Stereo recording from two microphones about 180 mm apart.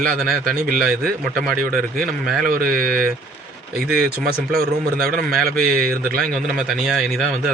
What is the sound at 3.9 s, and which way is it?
Speech, 5° right (ahead or behind).